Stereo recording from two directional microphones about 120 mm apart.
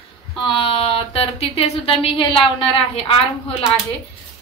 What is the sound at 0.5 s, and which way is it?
Speech, 50° left (ahead or behind).